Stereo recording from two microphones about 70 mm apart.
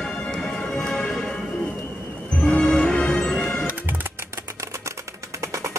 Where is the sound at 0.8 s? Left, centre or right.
Centre.